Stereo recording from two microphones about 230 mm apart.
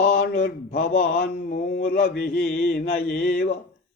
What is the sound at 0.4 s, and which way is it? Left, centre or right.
Speech, left.